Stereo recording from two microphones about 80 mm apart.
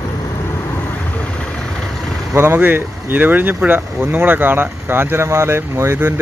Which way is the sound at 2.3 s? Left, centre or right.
Right.